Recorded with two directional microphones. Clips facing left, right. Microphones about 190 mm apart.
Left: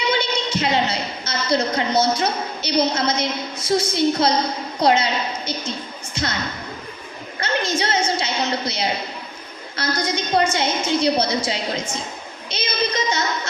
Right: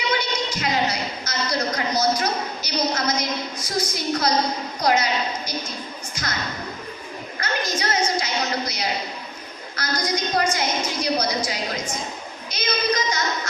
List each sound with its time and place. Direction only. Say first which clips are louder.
0.1 s a woman's voice: left 3 dB; 25° left (ahead or behind)
6.2 s a woman's voice: left 6 dB; 25° left (ahead or behind)
7.3 s a woman's voice: left 4 dB; 25° left (ahead or behind)